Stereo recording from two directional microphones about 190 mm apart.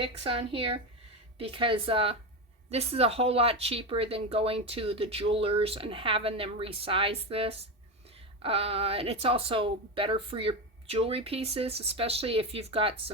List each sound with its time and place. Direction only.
0.0 s speech: 30° right (ahead or behind)